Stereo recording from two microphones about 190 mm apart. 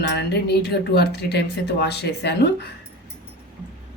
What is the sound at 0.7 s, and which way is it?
Speech, 60° left (ahead or behind).